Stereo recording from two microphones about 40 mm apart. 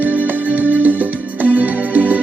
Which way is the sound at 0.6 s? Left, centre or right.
Right.